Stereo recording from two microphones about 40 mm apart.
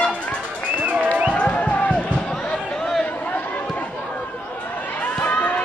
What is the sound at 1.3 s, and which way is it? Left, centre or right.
Music, left.